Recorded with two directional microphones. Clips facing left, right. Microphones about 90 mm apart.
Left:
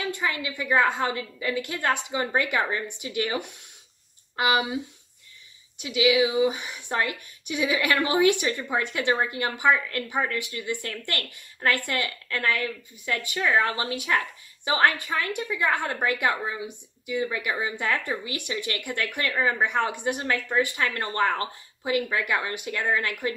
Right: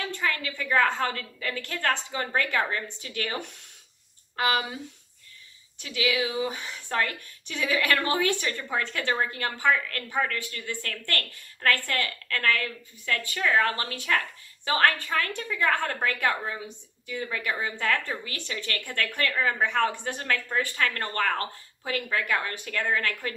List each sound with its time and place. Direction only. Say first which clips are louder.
0.0 s a woman's voice: left 1 dB; 15° left (ahead or behind)
5.8 s a woman's voice: left 6 dB; 15° left (ahead or behind)